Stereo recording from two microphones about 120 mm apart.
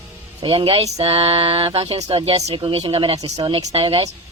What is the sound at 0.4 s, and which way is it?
Speech, 50° right (ahead or behind).